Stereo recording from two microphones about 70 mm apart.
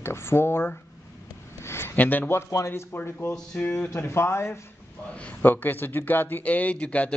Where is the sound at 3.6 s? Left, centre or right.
Left.